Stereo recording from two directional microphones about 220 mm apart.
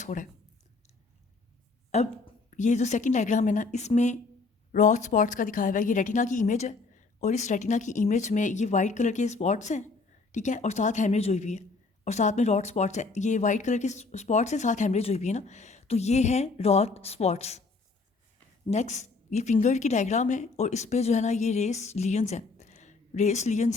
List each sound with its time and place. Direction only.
0.0 s speech: 35° left (ahead or behind)
1.9 s a woman's voice: 30° left (ahead or behind)
18.7 s speech: 30° left (ahead or behind)